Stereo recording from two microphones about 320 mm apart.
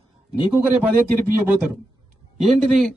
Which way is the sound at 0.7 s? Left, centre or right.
Centre.